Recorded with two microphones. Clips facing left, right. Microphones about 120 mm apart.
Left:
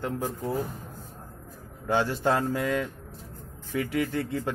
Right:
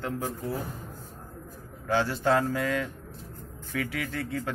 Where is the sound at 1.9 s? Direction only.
15° left (ahead or behind).